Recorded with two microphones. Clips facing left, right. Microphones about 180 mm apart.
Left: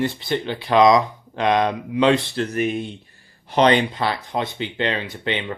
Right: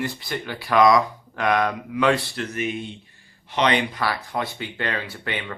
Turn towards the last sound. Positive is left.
turn(degrees=20)  # may be behind; listen again after turning